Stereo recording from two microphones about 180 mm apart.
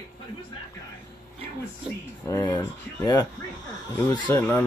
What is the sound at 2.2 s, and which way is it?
Speech, 20° left (ahead or behind).